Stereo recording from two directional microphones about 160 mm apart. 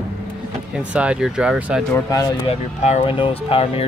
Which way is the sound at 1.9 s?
25° left (ahead or behind).